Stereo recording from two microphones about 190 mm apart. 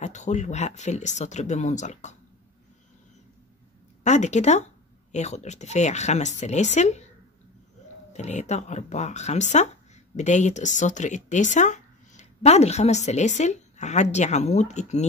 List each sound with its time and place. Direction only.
0.0 s speech: 40° left (ahead or behind)
4.0 s speech: 40° left (ahead or behind)
8.1 s speech: 35° left (ahead or behind)